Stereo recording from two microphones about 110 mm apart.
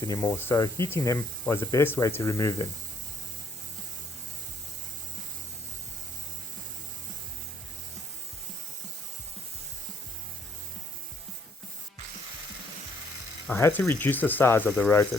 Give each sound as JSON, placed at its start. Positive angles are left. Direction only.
{"t": 0.2, "sound": "speech", "side_deg": 20}
{"t": 0.5, "sound": "speech", "side_deg": 30}
{"t": 13.5, "sound": "speech", "side_deg": 20}